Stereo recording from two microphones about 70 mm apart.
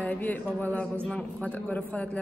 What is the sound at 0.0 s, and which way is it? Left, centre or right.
Speech, left.